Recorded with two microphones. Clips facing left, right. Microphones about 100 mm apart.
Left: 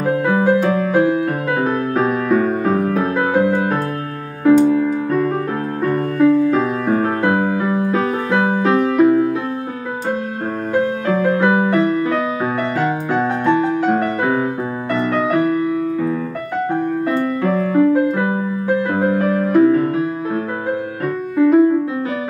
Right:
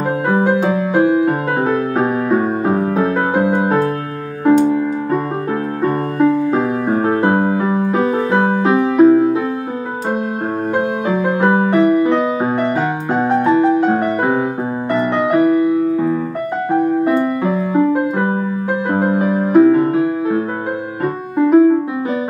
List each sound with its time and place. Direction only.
0.6 s music: 20° right (ahead or behind)
10.7 s music: 20° right (ahead or behind)
18.9 s music: 25° right (ahead or behind)